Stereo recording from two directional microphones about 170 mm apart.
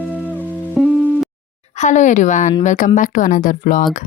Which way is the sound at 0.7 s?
5° right (ahead or behind).